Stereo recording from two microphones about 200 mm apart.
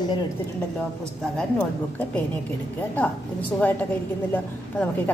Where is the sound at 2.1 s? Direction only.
10° left (ahead or behind).